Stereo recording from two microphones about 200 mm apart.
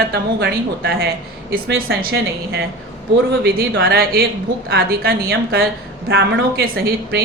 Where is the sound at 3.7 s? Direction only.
55° right (ahead or behind).